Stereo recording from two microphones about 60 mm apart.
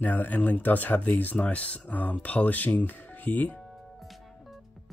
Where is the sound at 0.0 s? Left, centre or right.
Left.